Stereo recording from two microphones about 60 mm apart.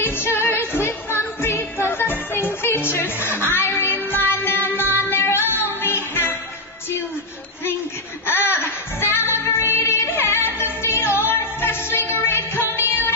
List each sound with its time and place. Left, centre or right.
0.0 s music: left
8.3 s music: left